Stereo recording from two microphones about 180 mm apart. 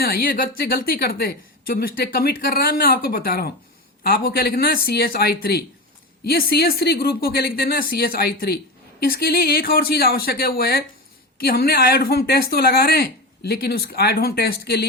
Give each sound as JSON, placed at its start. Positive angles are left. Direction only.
{"t": 0.0, "sound": "speech", "side_deg": 55}